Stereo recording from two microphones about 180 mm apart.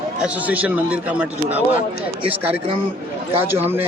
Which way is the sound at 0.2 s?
10° right (ahead or behind).